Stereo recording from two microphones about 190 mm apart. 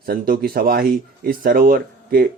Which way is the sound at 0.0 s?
50° right (ahead or behind).